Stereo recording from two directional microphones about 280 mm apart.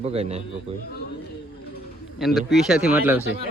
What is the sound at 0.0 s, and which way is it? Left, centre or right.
Speech, right.